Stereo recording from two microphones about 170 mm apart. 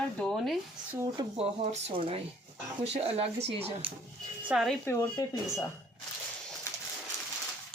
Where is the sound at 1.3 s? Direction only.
40° right (ahead or behind).